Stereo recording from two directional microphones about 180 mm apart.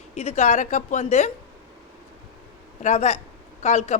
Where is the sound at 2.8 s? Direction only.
40° left (ahead or behind).